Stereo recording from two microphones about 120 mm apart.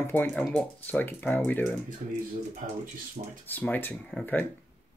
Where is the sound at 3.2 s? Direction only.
90° right.